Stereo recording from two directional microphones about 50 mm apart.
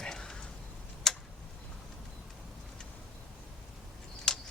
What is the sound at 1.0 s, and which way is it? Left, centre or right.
Tick-tock, centre.